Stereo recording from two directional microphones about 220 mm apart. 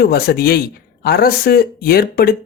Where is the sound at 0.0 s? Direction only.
45° left (ahead or behind).